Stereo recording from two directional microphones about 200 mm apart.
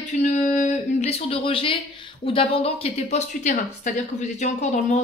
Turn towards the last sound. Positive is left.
turn(degrees=35)  # may be behind; listen again after turning